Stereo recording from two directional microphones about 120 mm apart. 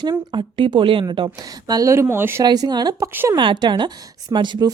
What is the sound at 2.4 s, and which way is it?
Speech, 35° right (ahead or behind).